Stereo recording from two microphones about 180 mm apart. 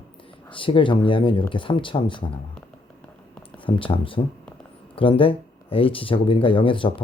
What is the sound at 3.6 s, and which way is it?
Speech, 30° left (ahead or behind).